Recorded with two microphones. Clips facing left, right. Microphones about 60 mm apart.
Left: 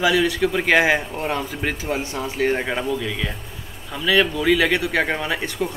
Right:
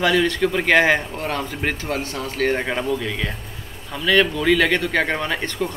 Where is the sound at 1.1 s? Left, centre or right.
Centre.